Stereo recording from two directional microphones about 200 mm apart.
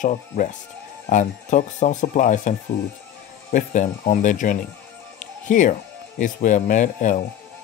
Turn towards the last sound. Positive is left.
turn(degrees=40)  # may be behind; listen again after turning